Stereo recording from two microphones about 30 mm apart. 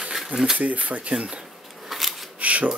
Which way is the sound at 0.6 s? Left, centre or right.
Right.